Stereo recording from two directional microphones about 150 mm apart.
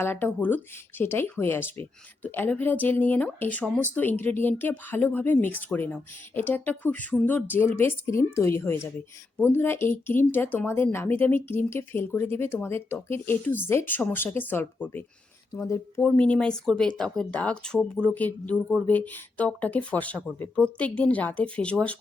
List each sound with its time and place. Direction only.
0.0 s speech: 15° left (ahead or behind)
16.0 s speech: 5° left (ahead or behind)